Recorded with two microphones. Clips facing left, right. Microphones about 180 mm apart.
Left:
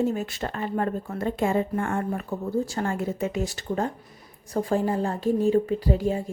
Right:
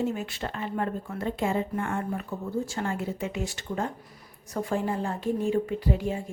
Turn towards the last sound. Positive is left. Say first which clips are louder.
# left 4 dB
turn(degrees=35)  # may be behind; listen again after turning